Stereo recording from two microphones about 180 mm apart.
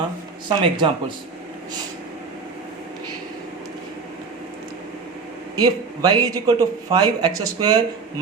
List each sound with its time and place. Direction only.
0.4 s a man's voice: 25° right (ahead or behind)
5.5 s a man's voice: 20° right (ahead or behind)